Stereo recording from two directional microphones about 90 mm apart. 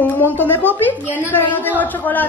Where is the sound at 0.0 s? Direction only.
20° left (ahead or behind).